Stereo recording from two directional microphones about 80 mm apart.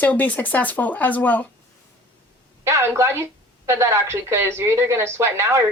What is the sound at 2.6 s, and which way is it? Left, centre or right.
A woman's voice, right.